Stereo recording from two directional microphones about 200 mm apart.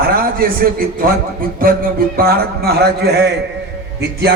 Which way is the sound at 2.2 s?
50° right (ahead or behind).